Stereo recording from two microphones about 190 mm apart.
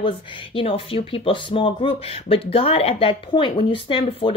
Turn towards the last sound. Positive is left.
turn(degrees=25)  # may be behind; listen again after turning